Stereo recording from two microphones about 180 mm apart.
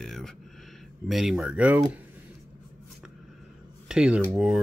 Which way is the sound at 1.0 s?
Centre (ahead or behind).